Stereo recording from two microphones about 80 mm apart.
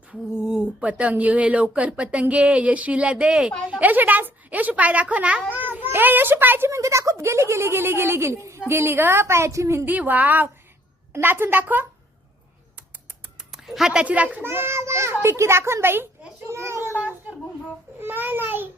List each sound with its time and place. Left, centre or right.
0.1 s a woman's voice: centre; by 6.7 s right
6.7 s speech: right
9.8 s a woman's voice: right
13.7 s speech: centre
14.0 s speech: centre
14.4 s a child's voice: right
18.0 s a woman's voice: right